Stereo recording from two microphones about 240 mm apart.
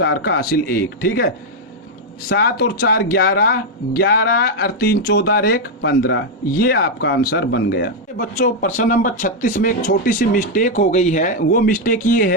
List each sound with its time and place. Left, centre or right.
0.0 s speech: left
2.3 s speech: left